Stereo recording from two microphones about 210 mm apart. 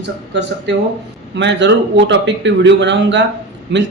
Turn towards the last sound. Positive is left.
turn(degrees=-55)  # may be behind; listen again after turning